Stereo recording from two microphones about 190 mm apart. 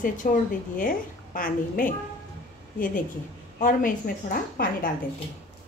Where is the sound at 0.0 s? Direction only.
45° left (ahead or behind).